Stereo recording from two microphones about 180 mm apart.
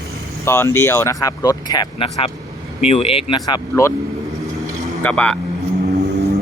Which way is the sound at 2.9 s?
35° left (ahead or behind).